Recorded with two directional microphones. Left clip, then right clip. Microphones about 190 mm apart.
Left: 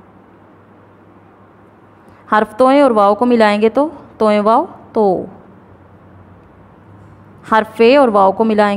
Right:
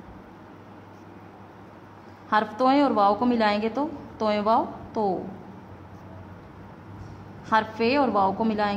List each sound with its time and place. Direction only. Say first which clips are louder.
2.2 s a woman's voice: left 10 dB; 40° left (ahead or behind)
7.4 s a woman's voice: left 12 dB; 40° left (ahead or behind)